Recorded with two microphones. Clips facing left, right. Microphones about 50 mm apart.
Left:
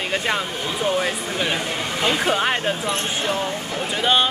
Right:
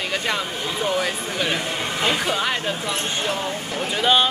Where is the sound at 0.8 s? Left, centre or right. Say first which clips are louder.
Left 2 dB; centre.